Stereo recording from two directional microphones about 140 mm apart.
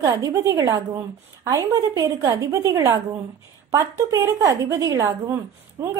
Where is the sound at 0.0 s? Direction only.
25° right (ahead or behind).